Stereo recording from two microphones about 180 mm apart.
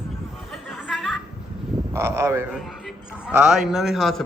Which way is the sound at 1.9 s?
15° right (ahead or behind).